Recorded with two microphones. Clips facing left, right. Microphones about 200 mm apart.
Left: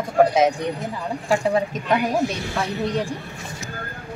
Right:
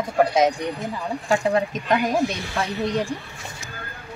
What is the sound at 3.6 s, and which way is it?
Vehicle, 45° left (ahead or behind).